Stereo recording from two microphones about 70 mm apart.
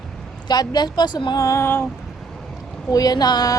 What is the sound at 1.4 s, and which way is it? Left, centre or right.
Speech, left.